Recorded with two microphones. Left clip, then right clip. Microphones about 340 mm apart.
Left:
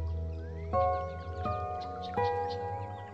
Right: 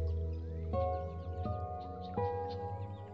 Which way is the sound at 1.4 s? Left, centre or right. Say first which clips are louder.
Left 7 dB; left.